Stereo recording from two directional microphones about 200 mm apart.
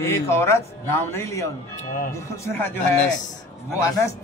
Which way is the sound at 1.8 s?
40° left (ahead or behind).